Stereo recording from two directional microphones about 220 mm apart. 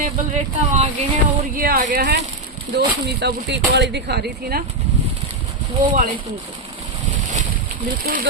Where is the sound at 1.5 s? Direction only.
40° right (ahead or behind).